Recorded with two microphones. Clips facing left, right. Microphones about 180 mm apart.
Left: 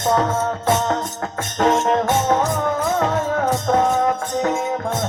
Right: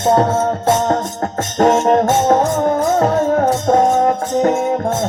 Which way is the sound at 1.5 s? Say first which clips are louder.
Right 5 dB; 40° right (ahead or behind).